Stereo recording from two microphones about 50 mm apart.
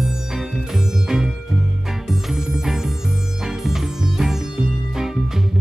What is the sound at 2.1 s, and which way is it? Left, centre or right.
Music, centre.